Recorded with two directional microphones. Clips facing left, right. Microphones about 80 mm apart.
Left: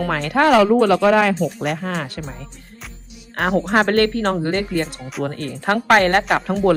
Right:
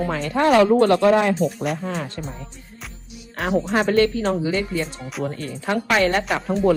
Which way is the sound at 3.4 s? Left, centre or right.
Left.